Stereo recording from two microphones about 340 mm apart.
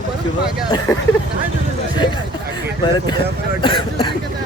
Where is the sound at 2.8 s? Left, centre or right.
Centre.